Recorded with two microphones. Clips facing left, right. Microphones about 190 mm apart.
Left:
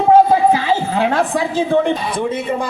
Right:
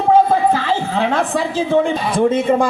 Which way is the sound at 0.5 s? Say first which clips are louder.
Left 2 dB; 10° left (ahead or behind).